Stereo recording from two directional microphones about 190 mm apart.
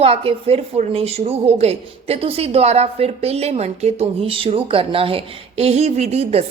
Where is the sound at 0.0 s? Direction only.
30° right (ahead or behind).